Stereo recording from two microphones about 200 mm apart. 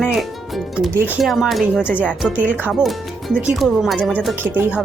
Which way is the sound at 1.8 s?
10° left (ahead or behind).